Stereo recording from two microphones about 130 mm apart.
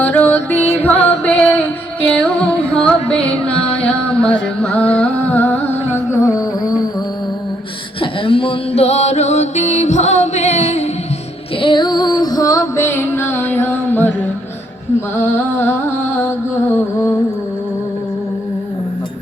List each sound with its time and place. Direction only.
0.0 s music: 15° left (ahead or behind)
8.2 s music: 45° left (ahead or behind); by 10.8 s 60° left (ahead or behind)
11.6 s music: 35° left (ahead or behind); by 14.1 s 15° left (ahead or behind)
15.1 s music: 20° left (ahead or behind)
16.7 s music: 20° left (ahead or behind)